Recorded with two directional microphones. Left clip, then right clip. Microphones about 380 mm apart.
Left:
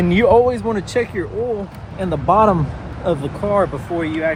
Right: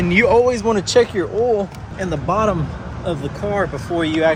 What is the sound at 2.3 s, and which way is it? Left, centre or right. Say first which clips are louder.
Speech: left 5 dB; centre.